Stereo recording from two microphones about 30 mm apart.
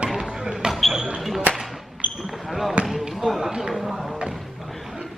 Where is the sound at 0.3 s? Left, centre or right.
Right.